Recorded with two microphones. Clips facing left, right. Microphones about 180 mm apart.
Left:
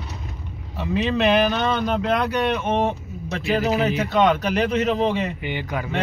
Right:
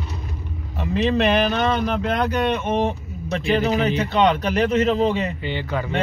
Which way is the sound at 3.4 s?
5° left (ahead or behind).